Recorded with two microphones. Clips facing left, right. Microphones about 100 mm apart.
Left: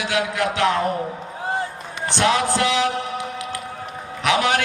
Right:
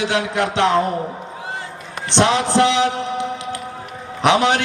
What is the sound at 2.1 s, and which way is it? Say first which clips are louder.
A man's voice: right 4 dB; 25° right (ahead or behind).